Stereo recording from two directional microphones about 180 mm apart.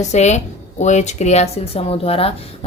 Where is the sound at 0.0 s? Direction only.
40° left (ahead or behind).